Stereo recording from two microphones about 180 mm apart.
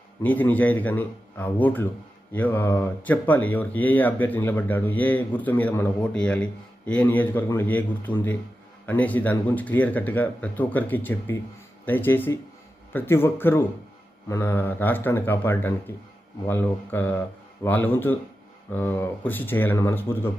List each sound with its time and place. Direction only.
0.2 s speech: 10° left (ahead or behind)